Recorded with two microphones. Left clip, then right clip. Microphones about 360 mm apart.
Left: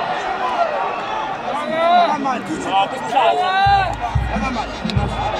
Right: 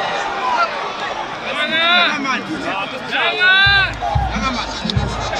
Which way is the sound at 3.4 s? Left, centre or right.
Left.